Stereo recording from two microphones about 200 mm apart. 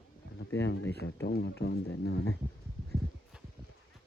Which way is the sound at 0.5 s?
60° left (ahead or behind).